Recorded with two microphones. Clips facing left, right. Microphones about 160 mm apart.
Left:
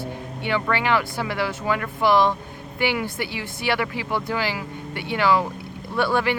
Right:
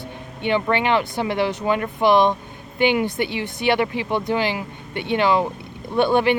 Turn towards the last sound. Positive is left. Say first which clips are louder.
# right 4 dB
turn(degrees=-20)  # may be behind; listen again after turning